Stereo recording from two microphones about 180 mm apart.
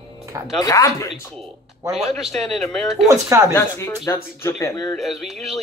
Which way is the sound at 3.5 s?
15° left (ahead or behind).